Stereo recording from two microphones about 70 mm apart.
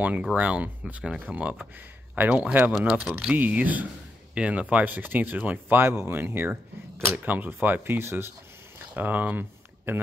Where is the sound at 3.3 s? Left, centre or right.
Right.